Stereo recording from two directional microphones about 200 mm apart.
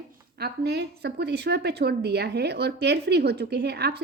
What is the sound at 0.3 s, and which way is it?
A woman's voice, 55° right (ahead or behind).